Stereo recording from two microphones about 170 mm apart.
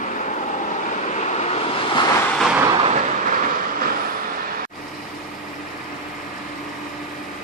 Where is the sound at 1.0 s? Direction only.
40° left (ahead or behind).